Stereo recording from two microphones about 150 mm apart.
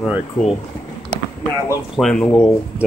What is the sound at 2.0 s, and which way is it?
Speech, 5° left (ahead or behind).